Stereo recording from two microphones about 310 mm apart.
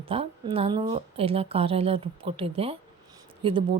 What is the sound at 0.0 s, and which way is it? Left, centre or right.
Speech, centre.